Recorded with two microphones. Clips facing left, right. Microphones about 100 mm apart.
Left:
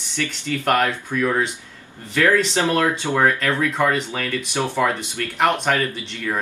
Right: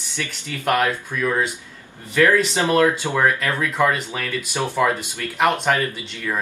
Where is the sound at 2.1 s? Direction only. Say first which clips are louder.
Right 1 dB; 15° right (ahead or behind).